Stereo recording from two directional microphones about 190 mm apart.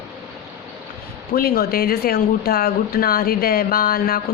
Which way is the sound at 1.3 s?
55° left (ahead or behind).